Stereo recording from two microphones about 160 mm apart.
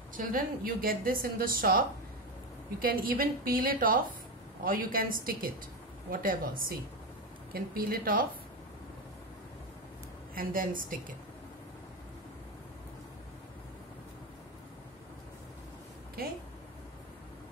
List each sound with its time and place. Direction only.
0.1 s a woman's voice: 60° right (ahead or behind)
10.3 s a woman's voice: 60° right (ahead or behind)